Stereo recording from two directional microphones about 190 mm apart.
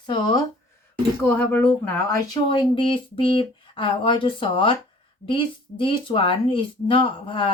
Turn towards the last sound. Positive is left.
turn(degrees=25)  # may be behind; listen again after turning